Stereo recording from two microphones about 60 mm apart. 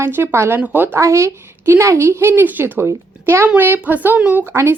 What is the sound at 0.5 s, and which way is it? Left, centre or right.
Speech, right.